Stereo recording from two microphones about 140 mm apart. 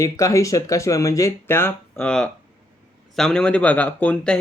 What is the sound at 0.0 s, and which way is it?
Speech, 20° left (ahead or behind).